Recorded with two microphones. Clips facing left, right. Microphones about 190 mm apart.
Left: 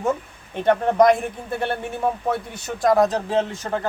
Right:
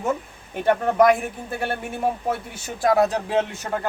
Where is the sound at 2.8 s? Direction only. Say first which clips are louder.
Left 1 dB; 5° right (ahead or behind).